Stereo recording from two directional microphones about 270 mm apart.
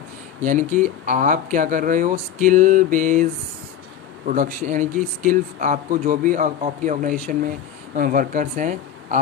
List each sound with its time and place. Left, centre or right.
0.4 s speech: right
4.3 s speech: right